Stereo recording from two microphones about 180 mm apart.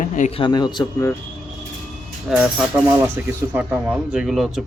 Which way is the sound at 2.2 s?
5° right (ahead or behind).